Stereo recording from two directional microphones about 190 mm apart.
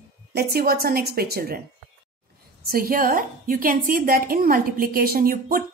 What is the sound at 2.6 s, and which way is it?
A woman's voice, 50° right (ahead or behind).